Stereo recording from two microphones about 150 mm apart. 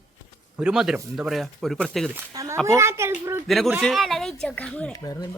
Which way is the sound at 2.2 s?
20° right (ahead or behind).